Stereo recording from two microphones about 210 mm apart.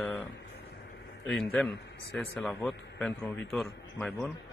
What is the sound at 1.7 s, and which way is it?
Speech, 55° left (ahead or behind).